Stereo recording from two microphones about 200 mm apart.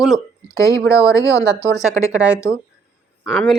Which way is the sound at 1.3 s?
60° right (ahead or behind).